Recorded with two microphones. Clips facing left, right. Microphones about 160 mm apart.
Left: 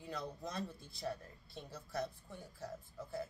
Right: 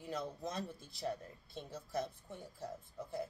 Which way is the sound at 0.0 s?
20° right (ahead or behind).